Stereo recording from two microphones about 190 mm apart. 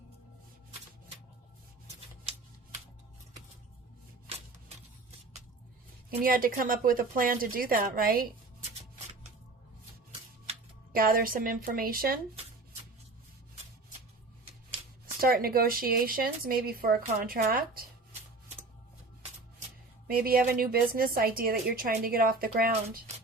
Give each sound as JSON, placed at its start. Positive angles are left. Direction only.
{"t": 6.1, "sound": "a woman's voice", "side_deg": -50}
{"t": 10.9, "sound": "a woman's voice", "side_deg": -50}
{"t": 15.0, "sound": "a woman's voice", "side_deg": -50}
{"t": 20.1, "sound": "a woman's voice", "side_deg": -50}